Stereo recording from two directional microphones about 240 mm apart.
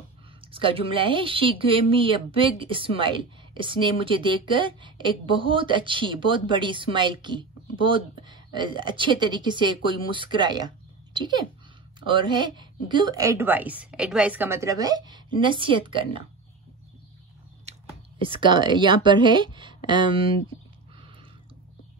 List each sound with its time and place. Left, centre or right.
0.5 s a woman's voice: right
18.3 s a woman's voice: centre